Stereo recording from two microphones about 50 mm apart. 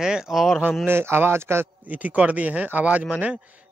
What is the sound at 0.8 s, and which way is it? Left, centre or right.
Speech, right.